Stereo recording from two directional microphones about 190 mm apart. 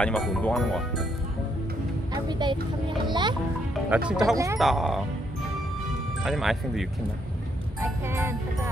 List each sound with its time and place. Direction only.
0.0 s speech: 5° left (ahead or behind)
2.1 s speech: 20° right (ahead or behind)
3.9 s speech: 5° right (ahead or behind)
6.2 s speech: centre (ahead or behind)
7.8 s speech: 15° right (ahead or behind)